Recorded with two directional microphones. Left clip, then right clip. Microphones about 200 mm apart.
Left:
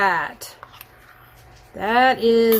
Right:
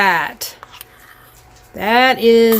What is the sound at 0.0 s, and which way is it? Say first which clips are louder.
Speech: right 5 dB; 30° right (ahead or behind).